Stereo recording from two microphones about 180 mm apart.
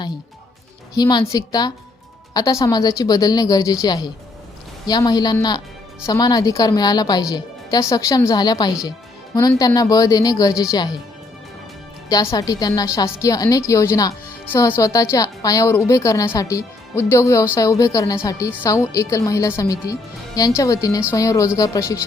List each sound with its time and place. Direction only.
0.9 s speech: 25° left (ahead or behind)
12.0 s a woman's voice: 20° left (ahead or behind)